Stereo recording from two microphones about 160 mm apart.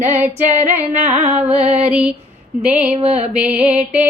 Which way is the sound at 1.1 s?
45° right (ahead or behind).